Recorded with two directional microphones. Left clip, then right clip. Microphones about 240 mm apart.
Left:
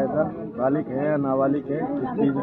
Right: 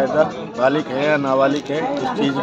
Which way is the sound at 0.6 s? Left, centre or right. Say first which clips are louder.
Right 6 dB; right.